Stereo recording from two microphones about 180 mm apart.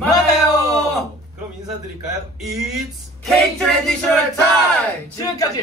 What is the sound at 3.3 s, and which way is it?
Speech, centre (ahead or behind).